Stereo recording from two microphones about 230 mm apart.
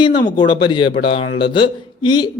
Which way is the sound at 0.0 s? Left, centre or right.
Centre.